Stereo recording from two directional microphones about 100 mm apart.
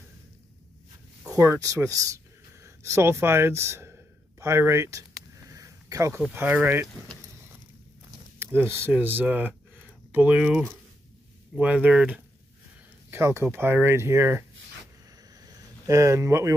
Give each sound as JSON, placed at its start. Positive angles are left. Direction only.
{"t": 1.6, "sound": "speech", "side_deg": -35}
{"t": 2.6, "sound": "a sound", "side_deg": -25}
{"t": 6.3, "sound": "speech", "side_deg": -20}
{"t": 8.5, "sound": "speech", "side_deg": -25}
{"t": 13.1, "sound": "speech", "side_deg": -25}
{"t": 15.4, "sound": "a sound", "side_deg": -30}